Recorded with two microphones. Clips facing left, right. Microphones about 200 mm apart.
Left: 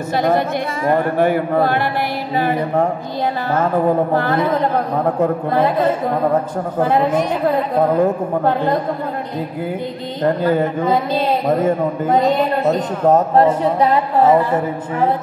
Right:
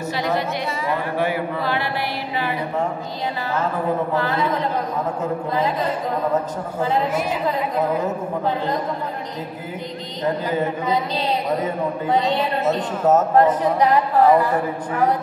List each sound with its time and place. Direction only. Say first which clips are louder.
0.1 s speech: left 7 dB; 50° left (ahead or behind)
4.1 s a woman's voice: left 5 dB; 55° left (ahead or behind)
10.2 s speech: left 6 dB; 55° left (ahead or behind)
12.7 s a man's voice: left 1 dB; 30° left (ahead or behind)